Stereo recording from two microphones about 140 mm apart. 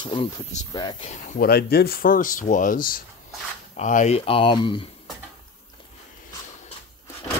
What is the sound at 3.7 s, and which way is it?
Speech, 60° left (ahead or behind).